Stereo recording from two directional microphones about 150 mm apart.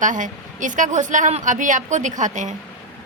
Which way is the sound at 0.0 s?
60° right (ahead or behind).